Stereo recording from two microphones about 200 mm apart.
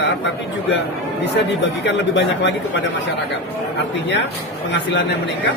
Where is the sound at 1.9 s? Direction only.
60° left (ahead or behind).